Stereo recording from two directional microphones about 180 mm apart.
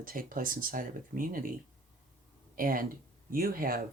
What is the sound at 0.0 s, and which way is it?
Speech, 50° right (ahead or behind).